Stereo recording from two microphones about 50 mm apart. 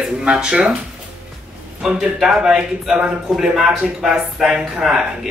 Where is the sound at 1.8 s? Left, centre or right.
Centre.